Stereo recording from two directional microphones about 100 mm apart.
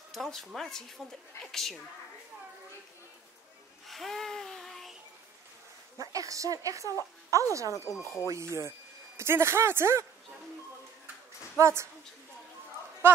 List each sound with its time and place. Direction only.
0.1 s speech: 5° left (ahead or behind)
3.8 s a sound: centre (ahead or behind)
5.9 s speech: 35° right (ahead or behind)
7.9 s speech: 30° left (ahead or behind)
8.3 s speech: 30° right (ahead or behind)
11.5 s a woman's voice: 30° right (ahead or behind)
13.0 s speech: 25° right (ahead or behind)